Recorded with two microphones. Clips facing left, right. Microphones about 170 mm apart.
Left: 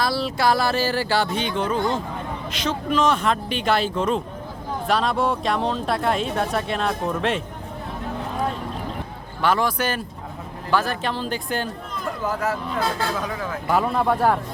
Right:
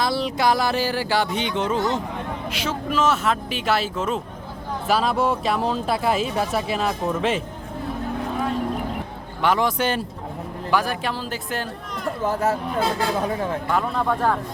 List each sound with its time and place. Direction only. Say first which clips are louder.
0.0 s speech: even; 20° right (ahead or behind)
2.5 s speech: left 3 dB; 5° right (ahead or behind)
9.4 s speech: right 1 dB; 20° right (ahead or behind)
10.7 s speech: even; 10° right (ahead or behind)
12.2 s speech: right 3 dB; 30° right (ahead or behind)
13.7 s speech: left 5 dB; 5° left (ahead or behind)